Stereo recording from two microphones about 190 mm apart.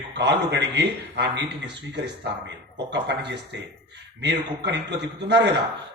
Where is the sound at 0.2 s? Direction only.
65° right (ahead or behind).